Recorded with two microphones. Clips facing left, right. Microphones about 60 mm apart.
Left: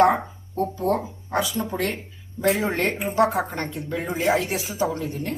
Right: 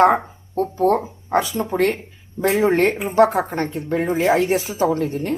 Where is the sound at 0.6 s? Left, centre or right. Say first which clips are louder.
Right 5 dB; right.